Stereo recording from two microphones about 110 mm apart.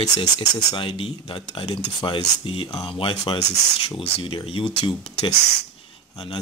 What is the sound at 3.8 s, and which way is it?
Speech, 55° left (ahead or behind).